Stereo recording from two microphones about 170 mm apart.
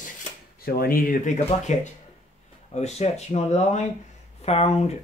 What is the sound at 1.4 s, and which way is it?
Speech, 45° left (ahead or behind).